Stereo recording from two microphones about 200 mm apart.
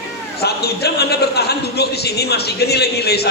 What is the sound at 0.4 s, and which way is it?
A man's voice, 55° left (ahead or behind).